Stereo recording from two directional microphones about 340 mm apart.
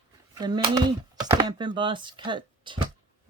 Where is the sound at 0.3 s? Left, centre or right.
Centre.